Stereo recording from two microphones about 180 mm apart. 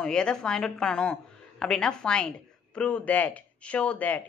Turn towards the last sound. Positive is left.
turn(degrees=10)  # may be behind; listen again after turning